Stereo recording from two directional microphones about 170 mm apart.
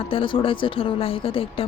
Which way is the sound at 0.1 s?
30° left (ahead or behind).